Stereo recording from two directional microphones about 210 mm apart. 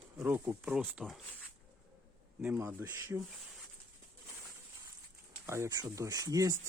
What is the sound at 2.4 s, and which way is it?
Speech, 10° right (ahead or behind).